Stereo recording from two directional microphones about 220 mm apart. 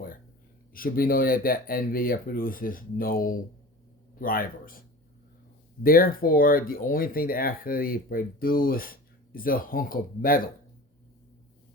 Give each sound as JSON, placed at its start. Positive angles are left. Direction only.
{"t": 0.7, "sound": "speech", "side_deg": 40}
{"t": 5.8, "sound": "speech", "side_deg": 40}